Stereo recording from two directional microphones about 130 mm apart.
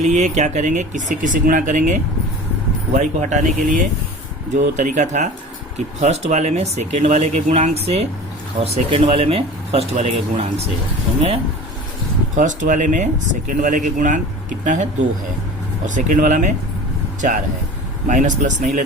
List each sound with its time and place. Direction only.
0.0 s speech: 65° right (ahead or behind); by 2.0 s 85° right
2.9 s speech: 70° right (ahead or behind)
4.5 s speech: 65° right (ahead or behind)
12.4 s speech: 80° right
13.5 s speech: 90° right; by 14.8 s 70° right (ahead or behind)
16.0 s speech: 75° right (ahead or behind)